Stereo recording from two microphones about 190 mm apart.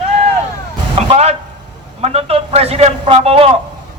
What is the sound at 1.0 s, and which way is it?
A man's voice, 35° right (ahead or behind).